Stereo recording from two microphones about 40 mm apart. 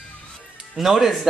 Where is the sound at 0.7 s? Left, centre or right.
Centre.